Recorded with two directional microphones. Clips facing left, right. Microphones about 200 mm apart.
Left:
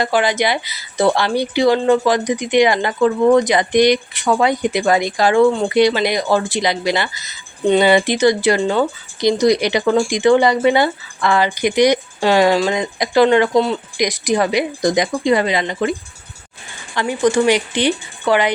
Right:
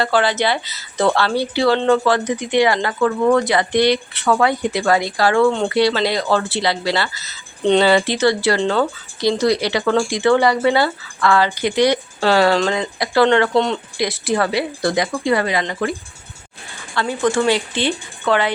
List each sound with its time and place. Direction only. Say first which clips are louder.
0.0 s speech: left 1 dB; 15° left (ahead or behind)